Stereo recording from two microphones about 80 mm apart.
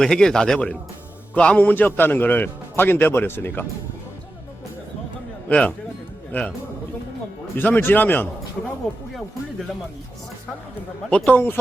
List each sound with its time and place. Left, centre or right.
0.0 s a man's voice: centre; by 3.7 s left
5.5 s a man's voice: centre
7.5 s a man's voice: left
11.3 s a man's voice: left